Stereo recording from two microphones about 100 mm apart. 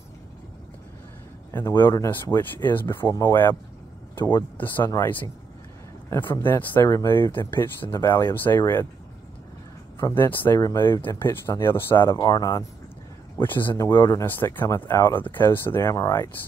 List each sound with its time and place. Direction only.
1.5 s speech: 25° left (ahead or behind)
4.1 s a sound: 20° left (ahead or behind)
4.6 s speech: 20° left (ahead or behind)
9.9 s speech: 25° left (ahead or behind)
12.2 s speech: 40° left (ahead or behind)
13.4 s speech: 20° left (ahead or behind)